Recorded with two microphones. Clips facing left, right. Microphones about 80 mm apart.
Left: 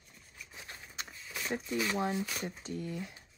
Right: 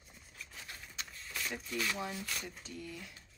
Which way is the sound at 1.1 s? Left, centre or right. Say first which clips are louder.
Left 1 dB; centre.